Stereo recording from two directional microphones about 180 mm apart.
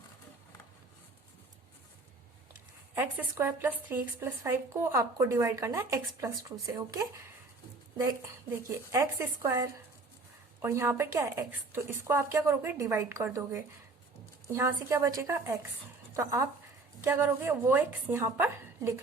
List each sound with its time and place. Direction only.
2.9 s a woman's voice: 10° right (ahead or behind)
8.9 s a woman's voice: 15° right (ahead or behind)